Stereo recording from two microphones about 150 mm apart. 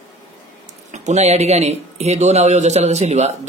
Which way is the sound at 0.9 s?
50° right (ahead or behind).